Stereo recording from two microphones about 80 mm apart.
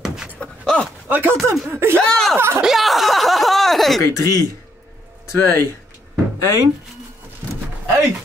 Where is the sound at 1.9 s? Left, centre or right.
Centre.